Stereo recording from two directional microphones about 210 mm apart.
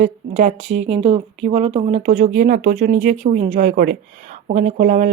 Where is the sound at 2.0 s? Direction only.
35° right (ahead or behind).